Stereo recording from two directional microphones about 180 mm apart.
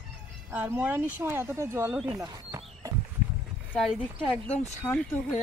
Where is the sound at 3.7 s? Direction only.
5° left (ahead or behind).